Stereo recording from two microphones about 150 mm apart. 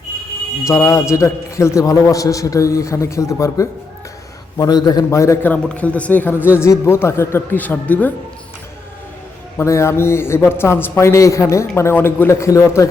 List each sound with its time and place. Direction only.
0.6 s a man's voice: 20° left (ahead or behind)
9.6 s a man's voice: 20° left (ahead or behind)